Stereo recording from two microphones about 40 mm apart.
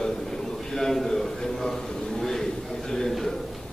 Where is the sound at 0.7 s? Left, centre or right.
Centre.